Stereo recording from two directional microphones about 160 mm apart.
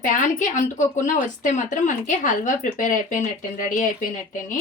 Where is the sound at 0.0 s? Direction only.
55° left (ahead or behind).